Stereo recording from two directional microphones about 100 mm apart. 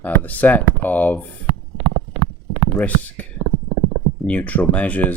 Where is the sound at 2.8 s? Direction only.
15° left (ahead or behind).